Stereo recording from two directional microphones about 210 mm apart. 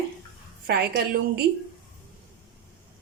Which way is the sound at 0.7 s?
50° right (ahead or behind).